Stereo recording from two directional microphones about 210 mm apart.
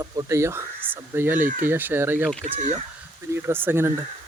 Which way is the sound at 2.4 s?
35° right (ahead or behind).